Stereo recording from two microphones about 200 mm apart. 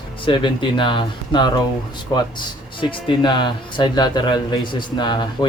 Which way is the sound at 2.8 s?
25° left (ahead or behind).